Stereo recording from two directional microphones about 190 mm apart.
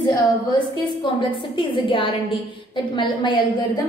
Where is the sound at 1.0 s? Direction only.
25° left (ahead or behind).